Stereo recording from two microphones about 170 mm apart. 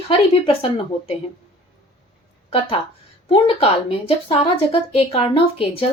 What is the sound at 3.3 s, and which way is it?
A woman's voice, 35° left (ahead or behind).